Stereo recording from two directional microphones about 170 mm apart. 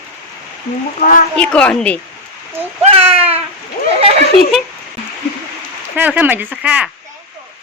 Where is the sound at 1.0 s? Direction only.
50° left (ahead or behind).